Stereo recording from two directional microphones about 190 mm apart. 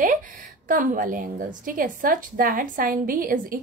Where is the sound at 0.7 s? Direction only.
45° right (ahead or behind).